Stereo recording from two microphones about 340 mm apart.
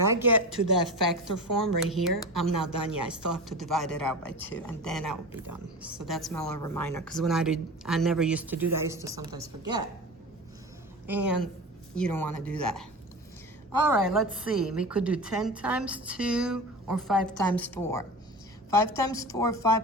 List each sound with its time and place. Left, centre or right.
0.1 s a woman's voice: centre
11.0 s a woman's voice: centre
14.0 s a woman's voice: centre